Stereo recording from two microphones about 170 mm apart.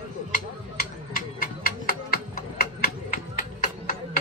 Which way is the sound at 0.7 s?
60° left (ahead or behind).